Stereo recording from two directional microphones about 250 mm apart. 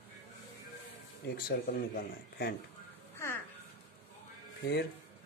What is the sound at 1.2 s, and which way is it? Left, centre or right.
Speech, left.